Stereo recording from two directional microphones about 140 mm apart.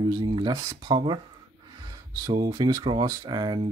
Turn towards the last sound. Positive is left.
turn(degrees=-30)  # may be behind; listen again after turning